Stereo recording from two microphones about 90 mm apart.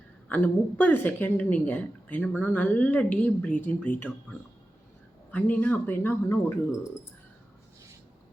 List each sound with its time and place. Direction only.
0.3 s a woman's voice: 15° left (ahead or behind)